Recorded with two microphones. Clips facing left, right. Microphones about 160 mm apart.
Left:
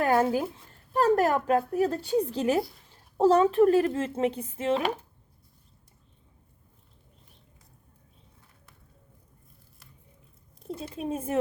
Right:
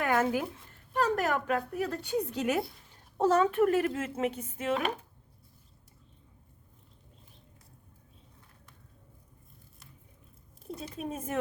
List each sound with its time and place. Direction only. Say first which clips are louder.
0.0 s a sound: left 4 dB; 35° left (ahead or behind)
0.9 s speech: left 6 dB; 40° left (ahead or behind)
10.8 s speech: left 5 dB; 30° left (ahead or behind)